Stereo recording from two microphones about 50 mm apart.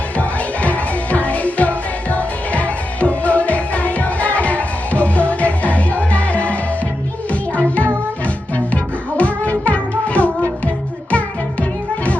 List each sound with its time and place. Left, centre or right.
0.2 s music: left